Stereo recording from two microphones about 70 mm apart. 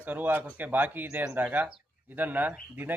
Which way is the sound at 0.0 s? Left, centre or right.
Right.